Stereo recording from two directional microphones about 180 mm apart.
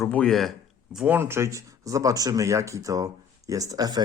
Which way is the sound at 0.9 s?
10° right (ahead or behind).